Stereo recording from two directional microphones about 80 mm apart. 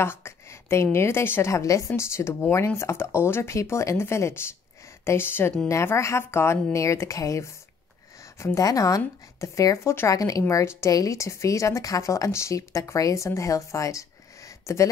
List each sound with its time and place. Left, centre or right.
0.0 s a sound: left
0.9 s speech: left
1.5 s speech: left
8.6 s speech: left
10.5 s speech: left